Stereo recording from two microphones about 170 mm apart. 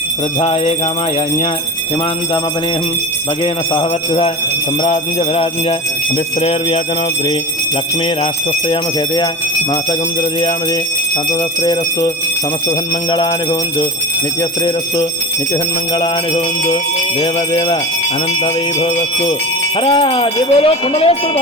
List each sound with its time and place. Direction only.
0.3 s speech: 35° left (ahead or behind)
3.4 s speech: 35° left (ahead or behind)
6.4 s speech: 35° left (ahead or behind)
11.6 s speech: 25° left (ahead or behind)
17.2 s speech: 30° left (ahead or behind)
19.8 s speech: 35° left (ahead or behind)